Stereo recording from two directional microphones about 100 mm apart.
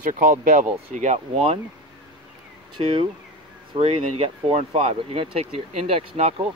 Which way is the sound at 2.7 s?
65° right (ahead or behind).